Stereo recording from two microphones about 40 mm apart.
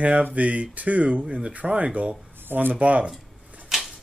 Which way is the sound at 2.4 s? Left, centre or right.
Right.